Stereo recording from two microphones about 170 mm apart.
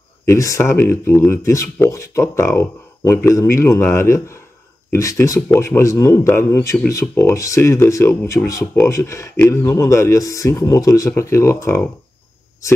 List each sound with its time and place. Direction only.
0.3 s speech: 15° left (ahead or behind)